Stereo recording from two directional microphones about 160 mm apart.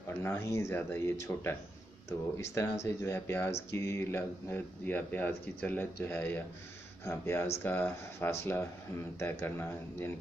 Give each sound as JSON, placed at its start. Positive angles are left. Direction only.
{"t": 0.2, "sound": "speech", "side_deg": 15}